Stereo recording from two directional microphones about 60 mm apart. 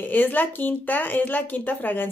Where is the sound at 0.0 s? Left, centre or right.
Left.